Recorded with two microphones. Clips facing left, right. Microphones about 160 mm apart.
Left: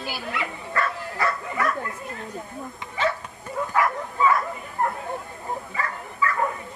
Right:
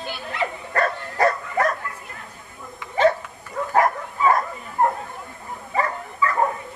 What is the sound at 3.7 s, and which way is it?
Dog, 40° right (ahead or behind).